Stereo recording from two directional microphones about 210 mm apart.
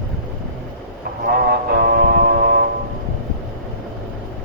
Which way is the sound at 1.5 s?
50° right (ahead or behind).